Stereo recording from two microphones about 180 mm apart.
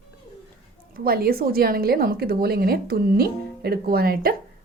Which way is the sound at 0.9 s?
55° right (ahead or behind).